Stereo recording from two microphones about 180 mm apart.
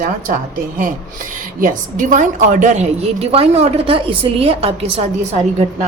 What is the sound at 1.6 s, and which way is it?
A woman's voice, 45° right (ahead or behind).